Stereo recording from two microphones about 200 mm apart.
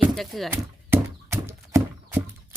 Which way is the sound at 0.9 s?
15° right (ahead or behind).